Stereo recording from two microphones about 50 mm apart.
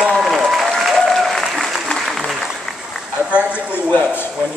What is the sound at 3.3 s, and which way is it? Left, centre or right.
Speech, right.